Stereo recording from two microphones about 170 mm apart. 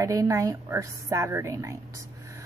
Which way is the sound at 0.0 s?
20° right (ahead or behind).